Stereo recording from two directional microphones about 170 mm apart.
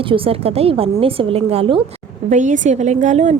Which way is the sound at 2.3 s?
45° right (ahead or behind).